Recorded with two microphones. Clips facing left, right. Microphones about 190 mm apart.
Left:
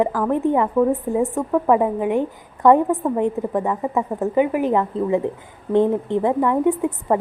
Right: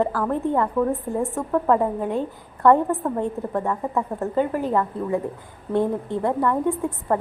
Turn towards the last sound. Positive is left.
turn(degrees=15)  # may be behind; listen again after turning